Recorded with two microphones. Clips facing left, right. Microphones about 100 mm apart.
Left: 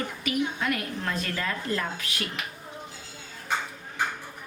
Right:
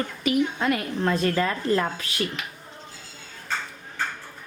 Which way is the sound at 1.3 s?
45° right (ahead or behind).